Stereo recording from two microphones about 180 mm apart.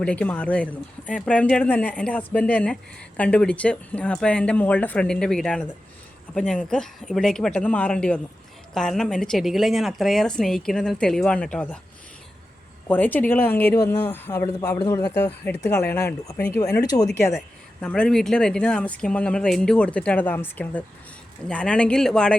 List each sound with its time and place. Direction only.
0.0 s speech: 5° left (ahead or behind)
12.9 s speech: 10° left (ahead or behind)
17.3 s speech: 5° left (ahead or behind)